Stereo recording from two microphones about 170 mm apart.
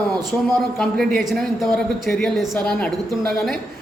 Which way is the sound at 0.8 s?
5° left (ahead or behind).